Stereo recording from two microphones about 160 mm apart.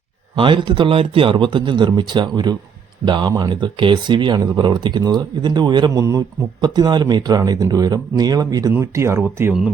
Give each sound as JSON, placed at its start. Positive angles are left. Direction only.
{"t": 0.3, "sound": "a man's voice", "side_deg": -30}